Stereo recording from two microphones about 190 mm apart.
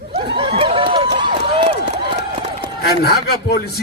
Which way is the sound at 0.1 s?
30° right (ahead or behind).